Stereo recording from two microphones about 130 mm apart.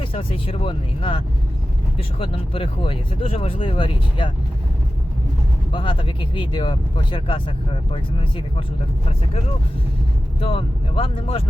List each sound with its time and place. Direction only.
0.0 s speech: 45° left (ahead or behind)
5.7 s speech: 40° left (ahead or behind)
10.4 s speech: 45° left (ahead or behind)